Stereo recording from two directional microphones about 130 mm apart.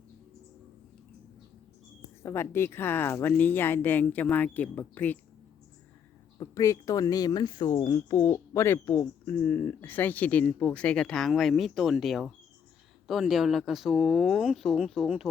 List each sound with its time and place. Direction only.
2.2 s speech: 20° left (ahead or behind)
6.4 s speech: 25° left (ahead or behind)
7.9 s speech: 25° left (ahead or behind); by 15.3 s 5° right (ahead or behind)